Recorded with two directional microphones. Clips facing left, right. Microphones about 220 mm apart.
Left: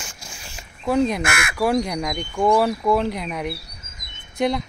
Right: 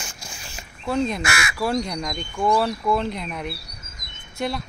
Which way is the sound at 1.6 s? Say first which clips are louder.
Left 4 dB; 15° left (ahead or behind).